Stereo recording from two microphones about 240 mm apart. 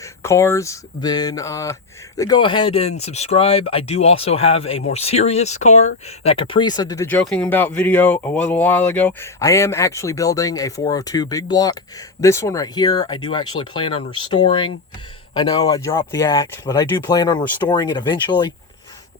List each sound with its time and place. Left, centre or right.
0.0 s speech: centre